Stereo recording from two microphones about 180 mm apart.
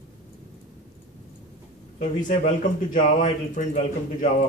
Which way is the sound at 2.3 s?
45° left (ahead or behind).